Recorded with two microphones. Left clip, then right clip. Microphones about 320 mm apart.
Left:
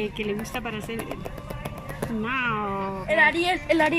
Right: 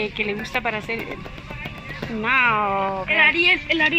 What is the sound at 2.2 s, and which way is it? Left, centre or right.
Speech, centre.